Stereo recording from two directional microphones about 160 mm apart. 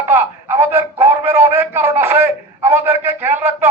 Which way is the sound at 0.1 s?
15° right (ahead or behind).